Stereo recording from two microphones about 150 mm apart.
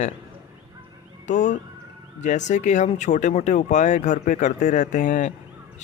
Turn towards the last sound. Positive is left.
turn(degrees=55)  # may be behind; listen again after turning